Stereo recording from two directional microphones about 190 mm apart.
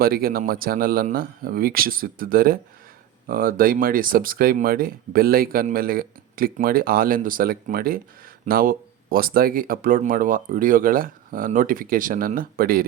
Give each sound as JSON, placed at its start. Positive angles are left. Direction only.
{"t": 0.0, "sound": "speech", "side_deg": -50}